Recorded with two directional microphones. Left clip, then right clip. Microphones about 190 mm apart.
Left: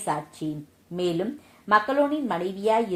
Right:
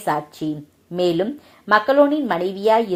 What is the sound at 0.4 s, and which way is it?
A woman's voice, 30° right (ahead or behind).